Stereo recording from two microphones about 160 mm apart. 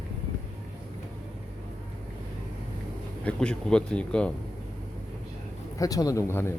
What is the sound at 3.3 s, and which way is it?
Speech, 5° left (ahead or behind).